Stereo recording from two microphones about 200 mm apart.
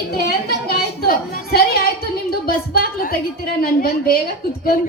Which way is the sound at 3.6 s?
50° left (ahead or behind).